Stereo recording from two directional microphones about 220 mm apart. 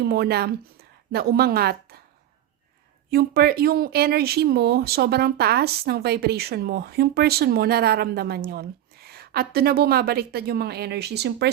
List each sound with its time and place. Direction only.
0.0 s speech: 45° right (ahead or behind)
3.1 s speech: 45° right (ahead or behind)